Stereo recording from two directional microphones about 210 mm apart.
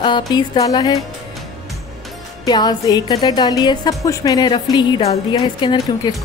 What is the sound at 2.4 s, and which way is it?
A woman's voice, 20° left (ahead or behind).